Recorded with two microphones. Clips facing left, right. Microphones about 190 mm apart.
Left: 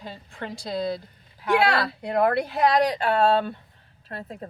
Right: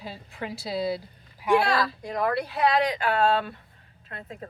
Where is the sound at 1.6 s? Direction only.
70° left (ahead or behind); by 4.3 s 35° left (ahead or behind).